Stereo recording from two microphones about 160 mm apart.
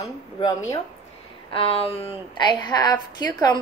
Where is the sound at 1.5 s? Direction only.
35° left (ahead or behind).